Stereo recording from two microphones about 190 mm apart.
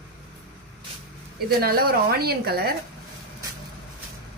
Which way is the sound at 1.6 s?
55° right (ahead or behind).